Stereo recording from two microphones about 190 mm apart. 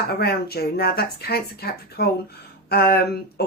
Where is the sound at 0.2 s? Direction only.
55° left (ahead or behind).